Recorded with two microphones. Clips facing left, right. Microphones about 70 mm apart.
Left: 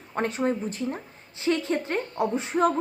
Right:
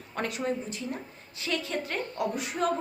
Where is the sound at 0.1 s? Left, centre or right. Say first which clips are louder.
Left 5 dB; left.